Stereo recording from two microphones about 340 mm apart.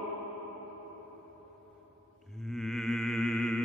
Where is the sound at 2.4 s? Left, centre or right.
Centre.